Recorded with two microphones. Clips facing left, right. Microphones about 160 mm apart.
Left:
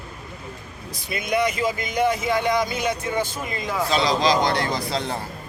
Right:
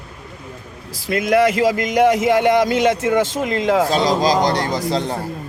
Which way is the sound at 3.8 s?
45° right (ahead or behind).